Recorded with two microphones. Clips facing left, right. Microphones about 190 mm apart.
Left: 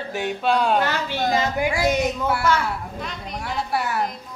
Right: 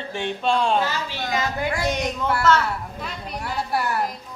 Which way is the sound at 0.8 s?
65° left (ahead or behind).